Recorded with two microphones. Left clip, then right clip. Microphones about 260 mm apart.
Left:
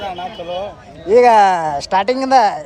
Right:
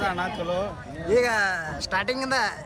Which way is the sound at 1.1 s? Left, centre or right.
Centre.